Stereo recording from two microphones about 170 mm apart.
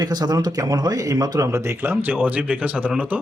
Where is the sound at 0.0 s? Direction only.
25° right (ahead or behind).